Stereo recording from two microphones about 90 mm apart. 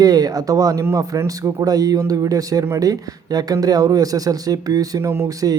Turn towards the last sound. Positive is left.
turn(degrees=-45)  # may be behind; listen again after turning